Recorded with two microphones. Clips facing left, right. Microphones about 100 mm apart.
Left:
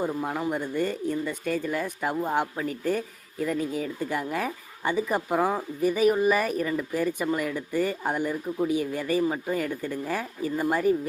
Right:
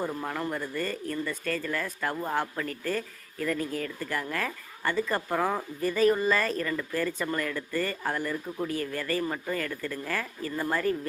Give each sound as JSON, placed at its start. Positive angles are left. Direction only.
{"t": 0.0, "sound": "speech", "side_deg": 10}